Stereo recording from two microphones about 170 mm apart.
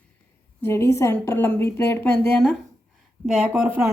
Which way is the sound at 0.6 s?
15° left (ahead or behind).